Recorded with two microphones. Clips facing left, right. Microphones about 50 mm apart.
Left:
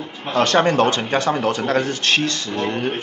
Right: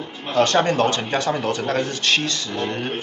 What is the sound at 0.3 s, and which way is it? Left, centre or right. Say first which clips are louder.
Speech: left 1 dB; left.